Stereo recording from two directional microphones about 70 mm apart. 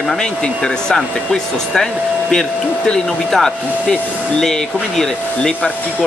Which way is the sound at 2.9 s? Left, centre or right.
Centre.